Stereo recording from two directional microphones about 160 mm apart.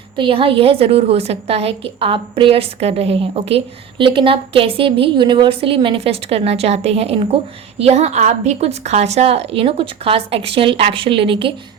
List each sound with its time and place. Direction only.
0.2 s a woman's voice: 35° right (ahead or behind)